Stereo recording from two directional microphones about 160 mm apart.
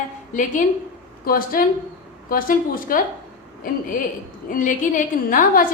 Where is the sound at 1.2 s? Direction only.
65° left (ahead or behind).